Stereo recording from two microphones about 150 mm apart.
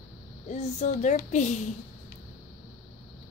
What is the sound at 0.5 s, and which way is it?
Speech, 50° left (ahead or behind).